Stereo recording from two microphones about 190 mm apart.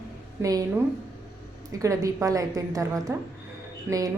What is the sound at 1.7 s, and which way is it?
A woman's voice, 15° right (ahead or behind).